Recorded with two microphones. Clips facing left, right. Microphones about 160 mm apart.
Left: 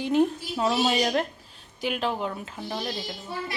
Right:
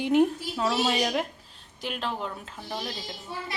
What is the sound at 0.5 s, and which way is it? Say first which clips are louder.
Speech: left 5 dB; 15° left (ahead or behind).